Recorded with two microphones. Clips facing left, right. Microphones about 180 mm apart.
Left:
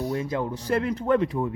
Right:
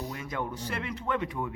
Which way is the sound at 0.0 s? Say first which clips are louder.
Left 8 dB; 35° left (ahead or behind).